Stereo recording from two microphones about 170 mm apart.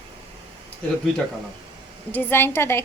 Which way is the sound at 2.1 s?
10° left (ahead or behind).